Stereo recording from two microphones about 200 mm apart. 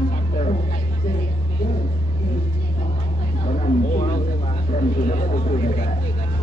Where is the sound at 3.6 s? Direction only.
35° left (ahead or behind).